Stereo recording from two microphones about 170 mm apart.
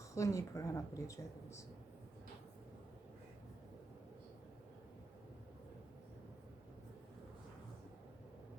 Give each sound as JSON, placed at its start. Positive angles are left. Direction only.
{"t": 0.1, "sound": "speech", "side_deg": 20}